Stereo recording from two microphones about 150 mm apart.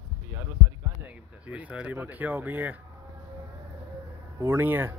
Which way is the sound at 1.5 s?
10° right (ahead or behind).